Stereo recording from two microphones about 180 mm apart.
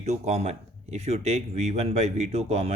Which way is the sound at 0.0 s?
40° right (ahead or behind).